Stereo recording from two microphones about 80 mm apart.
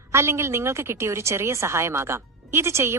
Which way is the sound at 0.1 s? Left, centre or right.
Right.